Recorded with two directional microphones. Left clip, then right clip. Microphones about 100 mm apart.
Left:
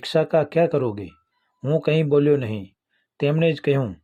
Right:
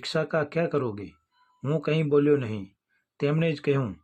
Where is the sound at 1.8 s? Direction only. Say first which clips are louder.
Left 4 dB; 25° left (ahead or behind).